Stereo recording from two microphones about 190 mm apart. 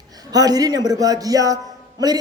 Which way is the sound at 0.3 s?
20° right (ahead or behind).